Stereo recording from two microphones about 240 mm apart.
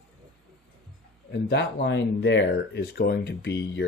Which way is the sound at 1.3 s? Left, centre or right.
Left.